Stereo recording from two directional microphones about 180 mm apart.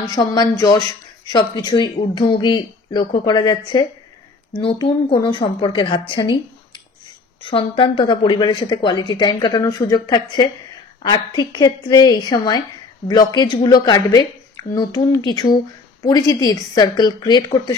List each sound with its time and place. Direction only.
0.0 s a woman's voice: 25° left (ahead or behind)
7.4 s a woman's voice: 30° left (ahead or behind)